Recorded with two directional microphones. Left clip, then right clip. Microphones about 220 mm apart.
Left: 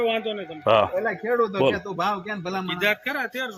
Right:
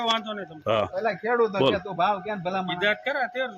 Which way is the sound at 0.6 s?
10° right (ahead or behind).